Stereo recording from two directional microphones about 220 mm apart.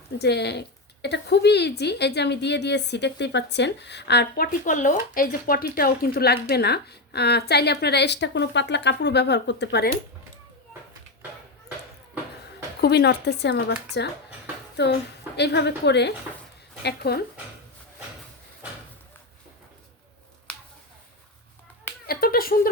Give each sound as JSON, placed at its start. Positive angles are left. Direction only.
{"t": 0.2, "sound": "a woman's voice", "side_deg": 50}
{"t": 12.8, "sound": "a woman's voice", "side_deg": 50}
{"t": 20.5, "sound": "finger snapping", "side_deg": 5}
{"t": 22.0, "sound": "finger snapping", "side_deg": 45}